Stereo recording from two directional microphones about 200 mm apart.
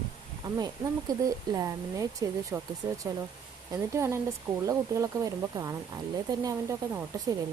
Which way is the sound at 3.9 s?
15° right (ahead or behind).